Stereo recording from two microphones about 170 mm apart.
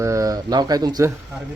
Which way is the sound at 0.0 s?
20° right (ahead or behind).